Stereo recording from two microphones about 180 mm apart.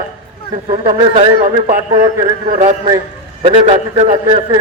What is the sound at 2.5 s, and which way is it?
A man's voice, 40° right (ahead or behind).